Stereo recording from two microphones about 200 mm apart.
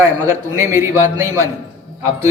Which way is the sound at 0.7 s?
15° right (ahead or behind).